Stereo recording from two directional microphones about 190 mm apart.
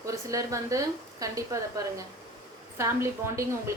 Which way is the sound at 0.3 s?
15° right (ahead or behind).